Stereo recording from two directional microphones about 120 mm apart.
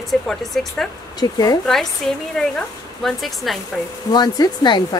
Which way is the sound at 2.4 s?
5° left (ahead or behind).